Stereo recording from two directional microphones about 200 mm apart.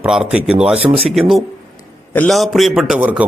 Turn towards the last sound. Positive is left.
turn(degrees=-5)  # may be behind; listen again after turning